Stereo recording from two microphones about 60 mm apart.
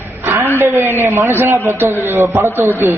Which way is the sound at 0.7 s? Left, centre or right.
Right.